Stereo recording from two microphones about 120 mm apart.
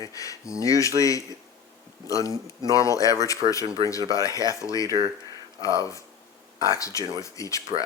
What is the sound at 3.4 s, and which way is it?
Speech, 45° right (ahead or behind).